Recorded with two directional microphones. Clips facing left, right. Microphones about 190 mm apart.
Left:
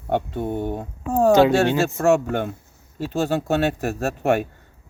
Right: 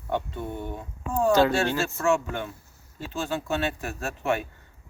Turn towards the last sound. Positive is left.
turn(degrees=45)  # may be behind; listen again after turning